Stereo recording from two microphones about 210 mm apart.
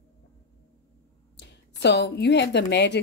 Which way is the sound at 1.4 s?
55° left (ahead or behind).